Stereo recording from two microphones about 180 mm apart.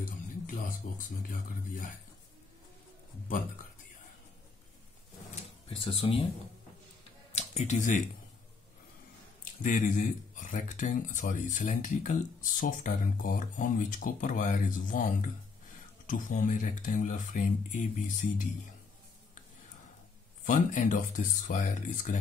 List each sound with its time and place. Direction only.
0.0 s speech: 50° left (ahead or behind)
5.7 s speech: 30° left (ahead or behind)
7.3 s speech: 40° left (ahead or behind)
9.4 s speech: 45° left (ahead or behind)
20.4 s speech: 45° left (ahead or behind)